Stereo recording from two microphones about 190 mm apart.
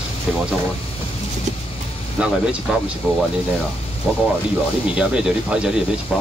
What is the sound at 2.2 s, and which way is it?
Speech, 5° right (ahead or behind).